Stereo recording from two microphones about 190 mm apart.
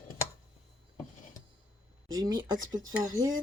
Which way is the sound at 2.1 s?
20° right (ahead or behind).